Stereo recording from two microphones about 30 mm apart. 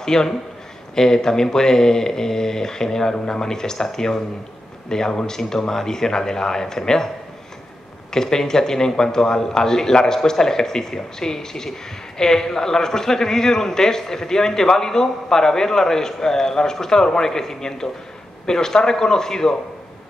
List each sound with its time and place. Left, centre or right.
0.0 s a man's voice: centre
8.1 s a man's voice: centre